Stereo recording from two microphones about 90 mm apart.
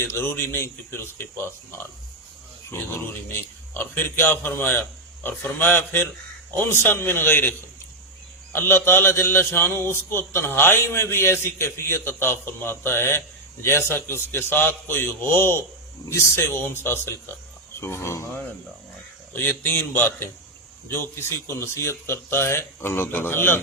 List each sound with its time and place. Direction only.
0.0 s a man's voice: 30° left (ahead or behind)
8.5 s a man's voice: 25° left (ahead or behind)
19.3 s a man's voice: 25° left (ahead or behind)